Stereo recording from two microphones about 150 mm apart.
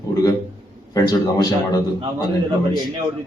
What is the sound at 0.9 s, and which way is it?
A man's voice, 25° left (ahead or behind).